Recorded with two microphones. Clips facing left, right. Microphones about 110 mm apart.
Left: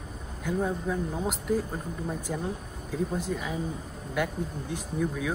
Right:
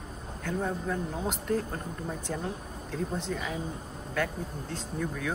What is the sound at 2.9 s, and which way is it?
Speech, 5° left (ahead or behind).